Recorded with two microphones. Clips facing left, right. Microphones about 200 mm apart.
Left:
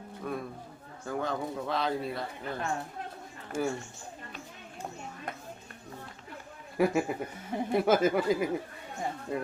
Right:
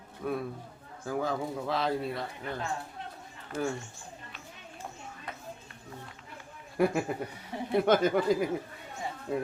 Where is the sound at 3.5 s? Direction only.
50° left (ahead or behind).